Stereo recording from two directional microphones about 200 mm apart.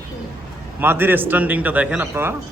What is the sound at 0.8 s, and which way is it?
A man's voice, 10° right (ahead or behind).